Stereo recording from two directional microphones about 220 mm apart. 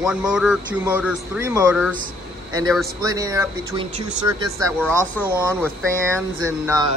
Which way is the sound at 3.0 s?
15° right (ahead or behind).